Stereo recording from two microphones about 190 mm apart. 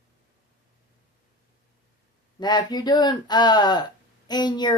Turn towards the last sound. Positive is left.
turn(degrees=20)  # may be behind; listen again after turning